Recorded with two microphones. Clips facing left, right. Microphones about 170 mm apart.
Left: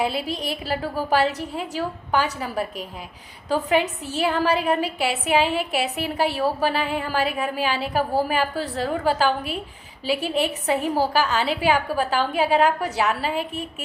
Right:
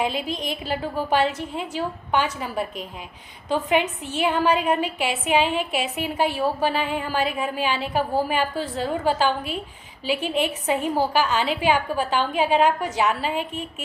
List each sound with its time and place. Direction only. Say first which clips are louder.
0.0 s a woman's voice: left 1 dB; 40° left (ahead or behind)